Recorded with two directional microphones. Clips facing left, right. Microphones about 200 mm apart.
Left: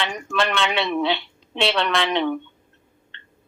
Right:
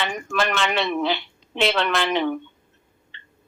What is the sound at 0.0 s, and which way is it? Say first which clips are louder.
Speech: even; 5° right (ahead or behind).